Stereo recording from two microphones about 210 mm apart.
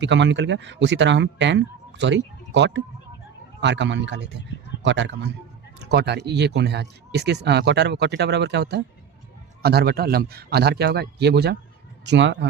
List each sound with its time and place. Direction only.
0.0 s speech: 60° right (ahead or behind)